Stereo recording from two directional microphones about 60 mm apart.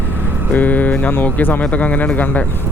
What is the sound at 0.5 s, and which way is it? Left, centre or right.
Speech, left.